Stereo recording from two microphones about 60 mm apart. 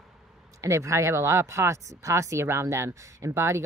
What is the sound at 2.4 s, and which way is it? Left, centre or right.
Speech, right.